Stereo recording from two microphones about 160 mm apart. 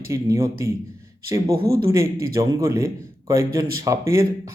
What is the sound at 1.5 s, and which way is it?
Speech, 75° right (ahead or behind).